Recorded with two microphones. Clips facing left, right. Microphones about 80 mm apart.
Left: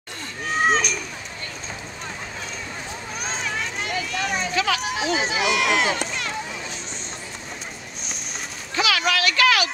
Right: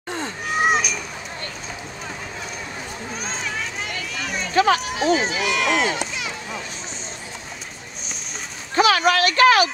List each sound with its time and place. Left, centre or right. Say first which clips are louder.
0.6 s children playing: right 1 dB; centre
3.2 s children playing: left 1 dB; centre
4.6 s speech: right 8 dB; right
5.1 s run: left 1 dB; centre
8.7 s a sound: right 5 dB; right